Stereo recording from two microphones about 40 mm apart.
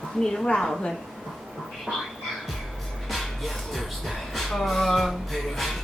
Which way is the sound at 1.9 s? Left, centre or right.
Centre.